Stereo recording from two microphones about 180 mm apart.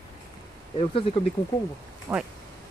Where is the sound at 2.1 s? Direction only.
15° right (ahead or behind).